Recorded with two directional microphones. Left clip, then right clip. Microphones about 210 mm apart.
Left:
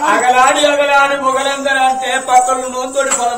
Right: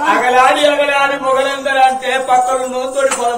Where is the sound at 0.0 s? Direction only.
20° left (ahead or behind).